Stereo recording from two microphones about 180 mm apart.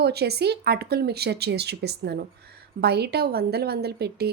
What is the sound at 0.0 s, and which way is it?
A woman's voice, 65° right (ahead or behind).